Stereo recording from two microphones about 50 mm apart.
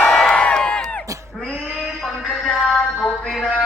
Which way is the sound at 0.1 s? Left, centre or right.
Centre.